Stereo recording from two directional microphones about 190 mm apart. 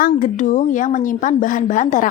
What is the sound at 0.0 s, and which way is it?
Speech, 40° left (ahead or behind).